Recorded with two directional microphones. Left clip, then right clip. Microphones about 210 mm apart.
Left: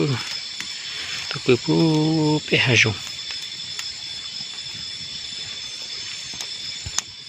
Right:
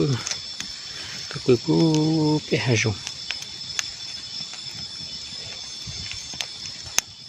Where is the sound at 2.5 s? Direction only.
5° right (ahead or behind).